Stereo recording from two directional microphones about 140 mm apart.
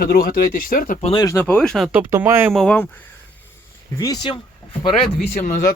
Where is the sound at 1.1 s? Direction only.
25° left (ahead or behind).